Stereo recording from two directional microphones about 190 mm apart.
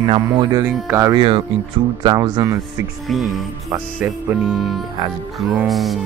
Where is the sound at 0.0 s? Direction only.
25° right (ahead or behind).